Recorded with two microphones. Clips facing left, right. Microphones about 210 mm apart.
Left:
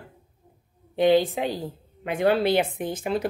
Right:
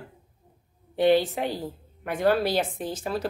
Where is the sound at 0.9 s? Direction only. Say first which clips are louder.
Left 1 dB; 15° left (ahead or behind).